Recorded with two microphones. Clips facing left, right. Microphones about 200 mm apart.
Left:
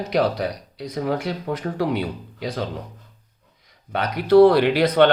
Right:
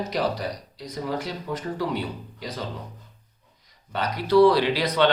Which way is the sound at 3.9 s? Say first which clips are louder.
Left 5 dB; 60° left (ahead or behind).